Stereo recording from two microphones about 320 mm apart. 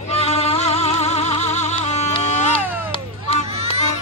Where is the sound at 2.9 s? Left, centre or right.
Centre.